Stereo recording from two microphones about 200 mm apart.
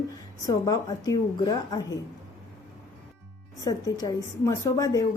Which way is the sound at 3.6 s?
20° left (ahead or behind).